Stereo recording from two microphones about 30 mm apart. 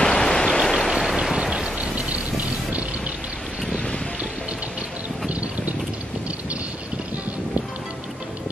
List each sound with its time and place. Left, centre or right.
0.1 s stream: centre
0.9 s a sound: centre
1.4 s a sound: right
1.8 s rain: right
3.7 s music: left
5.3 s mechanisms: right